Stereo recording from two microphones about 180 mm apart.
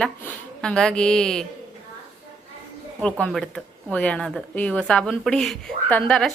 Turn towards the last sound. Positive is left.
turn(degrees=5)  # may be behind; listen again after turning